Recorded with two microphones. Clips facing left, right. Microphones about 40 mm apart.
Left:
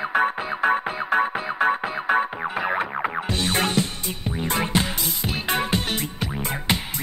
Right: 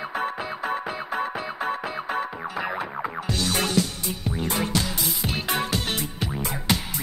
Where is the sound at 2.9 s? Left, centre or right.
Left.